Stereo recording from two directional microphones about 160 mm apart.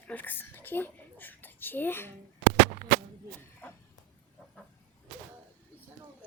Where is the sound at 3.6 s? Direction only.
10° left (ahead or behind).